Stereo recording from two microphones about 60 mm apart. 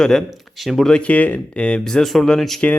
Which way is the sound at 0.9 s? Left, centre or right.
Centre.